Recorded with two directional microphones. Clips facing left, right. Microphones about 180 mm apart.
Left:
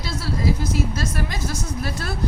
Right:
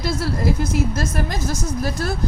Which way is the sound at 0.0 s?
55° right (ahead or behind).